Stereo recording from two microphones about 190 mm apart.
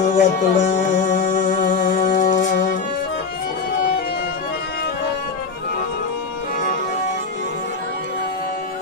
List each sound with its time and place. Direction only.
0.2 s music: 40° left (ahead or behind)